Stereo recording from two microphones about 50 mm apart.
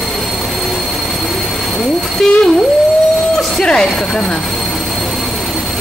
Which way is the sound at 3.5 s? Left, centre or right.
Centre.